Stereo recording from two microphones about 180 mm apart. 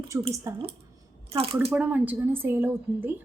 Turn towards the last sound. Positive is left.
turn(degrees=-10)  # may be behind; listen again after turning